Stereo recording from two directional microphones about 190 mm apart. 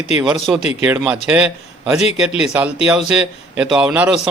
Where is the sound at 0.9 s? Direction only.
5° right (ahead or behind).